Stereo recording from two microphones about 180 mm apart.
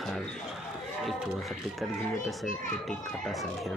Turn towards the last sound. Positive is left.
turn(degrees=0)  # may be behind; listen again after turning